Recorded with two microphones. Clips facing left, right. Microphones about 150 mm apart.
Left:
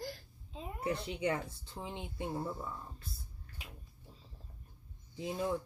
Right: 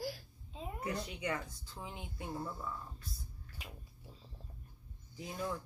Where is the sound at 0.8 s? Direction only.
30° left (ahead or behind).